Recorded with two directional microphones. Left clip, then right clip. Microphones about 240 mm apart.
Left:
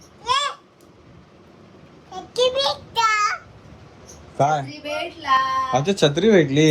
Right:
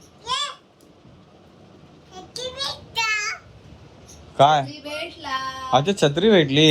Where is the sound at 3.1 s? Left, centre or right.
Left.